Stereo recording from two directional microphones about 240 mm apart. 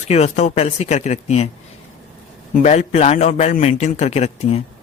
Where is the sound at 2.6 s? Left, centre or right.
Left.